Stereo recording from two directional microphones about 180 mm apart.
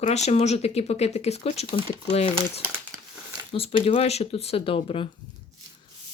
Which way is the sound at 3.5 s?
30° left (ahead or behind).